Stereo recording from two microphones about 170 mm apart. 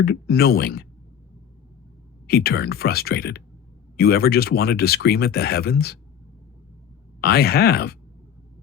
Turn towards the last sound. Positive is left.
turn(degrees=65)  # may be behind; listen again after turning